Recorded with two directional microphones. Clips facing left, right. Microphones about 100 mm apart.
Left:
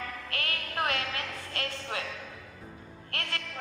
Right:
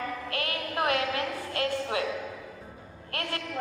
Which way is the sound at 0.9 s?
25° right (ahead or behind).